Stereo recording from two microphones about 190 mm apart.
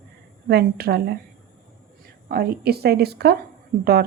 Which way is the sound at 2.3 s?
55° right (ahead or behind).